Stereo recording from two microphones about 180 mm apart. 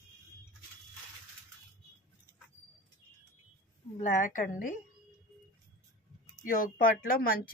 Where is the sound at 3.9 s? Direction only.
45° left (ahead or behind).